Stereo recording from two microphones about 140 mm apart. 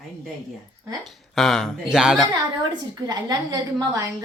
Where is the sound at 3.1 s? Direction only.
25° right (ahead or behind).